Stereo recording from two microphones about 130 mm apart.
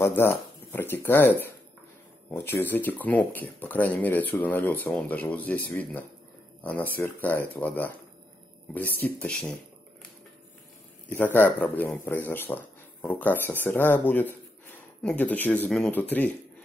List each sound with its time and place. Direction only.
0.0 s speech: 15° left (ahead or behind)
11.1 s speech: 15° left (ahead or behind)